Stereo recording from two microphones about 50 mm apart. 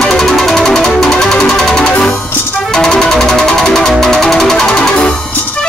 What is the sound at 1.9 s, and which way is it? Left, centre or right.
Music, left.